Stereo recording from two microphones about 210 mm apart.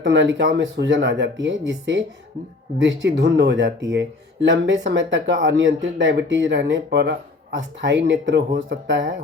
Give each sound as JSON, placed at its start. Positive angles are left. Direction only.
{"t": 0.0, "sound": "speech", "side_deg": -60}